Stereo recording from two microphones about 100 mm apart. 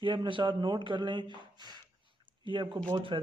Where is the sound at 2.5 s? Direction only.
55° right (ahead or behind).